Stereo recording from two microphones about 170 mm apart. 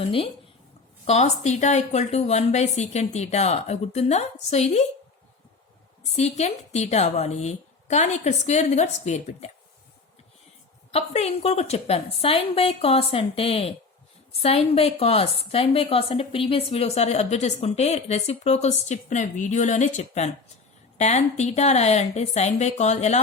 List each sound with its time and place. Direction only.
0.0 s a woman's voice: 30° left (ahead or behind)
6.1 s a woman's voice: 40° left (ahead or behind)
10.9 s a woman's voice: 40° left (ahead or behind)